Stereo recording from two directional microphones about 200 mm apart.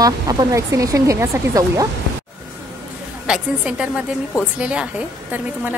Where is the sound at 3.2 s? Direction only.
5° right (ahead or behind).